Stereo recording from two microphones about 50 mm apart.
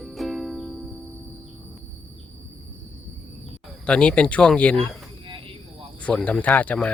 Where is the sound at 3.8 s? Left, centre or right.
Centre.